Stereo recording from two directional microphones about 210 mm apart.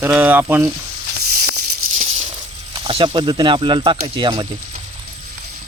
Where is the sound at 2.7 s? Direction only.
25° right (ahead or behind).